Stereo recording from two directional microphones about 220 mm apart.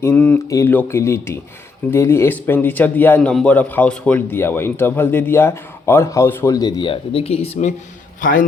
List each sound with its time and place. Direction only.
0.0 s a man's voice: 10° left (ahead or behind); by 7.7 s 30° left (ahead or behind)
8.2 s a man's voice: 40° left (ahead or behind)